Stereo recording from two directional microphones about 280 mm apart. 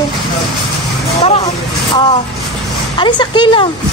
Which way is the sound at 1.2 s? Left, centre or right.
Centre.